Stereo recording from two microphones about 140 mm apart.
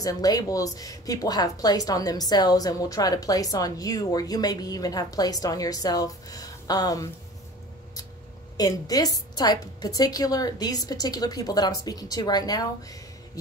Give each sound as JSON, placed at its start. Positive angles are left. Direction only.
{"t": 0.0, "sound": "a woman's voice", "side_deg": 25}
{"t": 8.5, "sound": "a woman's voice", "side_deg": 25}